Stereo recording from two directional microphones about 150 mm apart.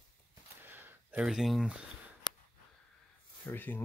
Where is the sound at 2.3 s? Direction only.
30° left (ahead or behind).